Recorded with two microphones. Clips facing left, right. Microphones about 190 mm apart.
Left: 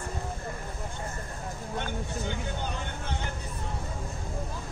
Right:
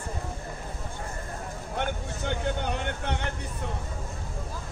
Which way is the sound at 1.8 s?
65° right (ahead or behind).